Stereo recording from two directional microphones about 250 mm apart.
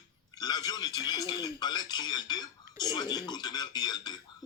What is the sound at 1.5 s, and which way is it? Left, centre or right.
Speech, centre.